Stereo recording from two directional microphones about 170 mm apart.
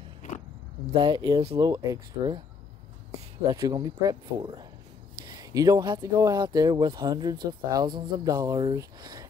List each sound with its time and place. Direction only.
0.9 s speech: 25° right (ahead or behind)
3.5 s speech: 20° right (ahead or behind)